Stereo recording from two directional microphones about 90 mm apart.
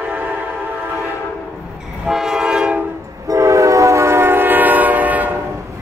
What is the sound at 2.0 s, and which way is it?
Train, 5° right (ahead or behind).